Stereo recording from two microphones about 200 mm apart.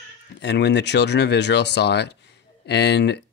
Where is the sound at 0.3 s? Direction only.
60° left (ahead or behind).